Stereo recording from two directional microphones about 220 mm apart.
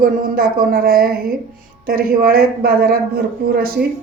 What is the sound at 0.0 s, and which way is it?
A woman's voice, 45° right (ahead or behind).